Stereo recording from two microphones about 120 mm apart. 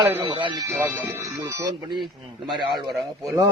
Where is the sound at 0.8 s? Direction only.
15° right (ahead or behind).